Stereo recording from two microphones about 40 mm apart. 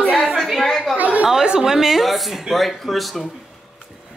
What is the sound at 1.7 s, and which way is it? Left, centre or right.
Speech, centre.